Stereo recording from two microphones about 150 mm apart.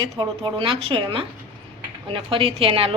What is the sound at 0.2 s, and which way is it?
A woman's voice, 35° right (ahead or behind).